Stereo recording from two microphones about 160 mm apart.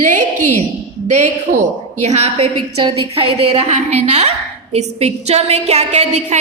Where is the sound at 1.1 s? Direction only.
50° right (ahead or behind).